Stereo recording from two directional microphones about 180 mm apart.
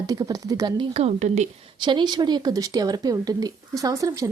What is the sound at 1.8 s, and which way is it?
Speech, 25° right (ahead or behind).